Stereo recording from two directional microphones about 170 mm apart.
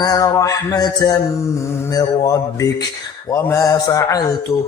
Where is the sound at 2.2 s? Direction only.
20° left (ahead or behind).